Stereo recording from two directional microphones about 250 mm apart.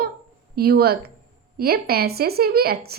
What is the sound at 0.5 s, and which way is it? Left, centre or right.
Speech, right.